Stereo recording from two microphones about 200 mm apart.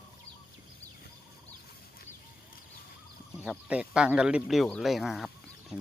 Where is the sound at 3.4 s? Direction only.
5° right (ahead or behind).